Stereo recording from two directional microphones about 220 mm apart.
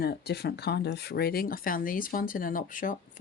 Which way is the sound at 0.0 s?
45° left (ahead or behind).